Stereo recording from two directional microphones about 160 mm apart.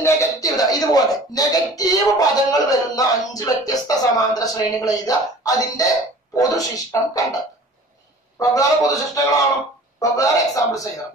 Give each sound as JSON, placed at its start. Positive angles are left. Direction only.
{"t": 0.0, "sound": "speech", "side_deg": 20}
{"t": 8.4, "sound": "speech", "side_deg": 20}